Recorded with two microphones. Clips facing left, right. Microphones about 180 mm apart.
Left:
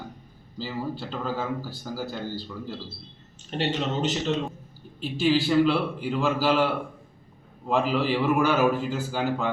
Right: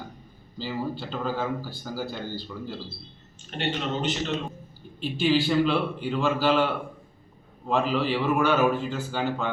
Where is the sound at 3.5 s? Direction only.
30° left (ahead or behind).